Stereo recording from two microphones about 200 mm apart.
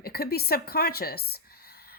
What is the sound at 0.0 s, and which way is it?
Speech, 50° left (ahead or behind).